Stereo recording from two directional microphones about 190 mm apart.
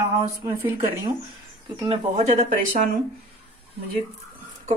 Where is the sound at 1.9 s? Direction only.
30° right (ahead or behind).